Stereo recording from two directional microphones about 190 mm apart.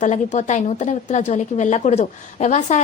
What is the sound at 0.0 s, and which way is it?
A woman's voice, 40° left (ahead or behind).